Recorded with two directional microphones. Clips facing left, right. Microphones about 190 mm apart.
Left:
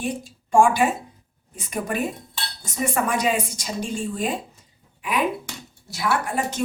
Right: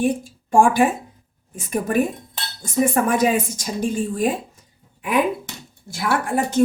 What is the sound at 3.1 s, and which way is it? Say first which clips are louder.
A woman's voice: right 4 dB; 50° right (ahead or behind).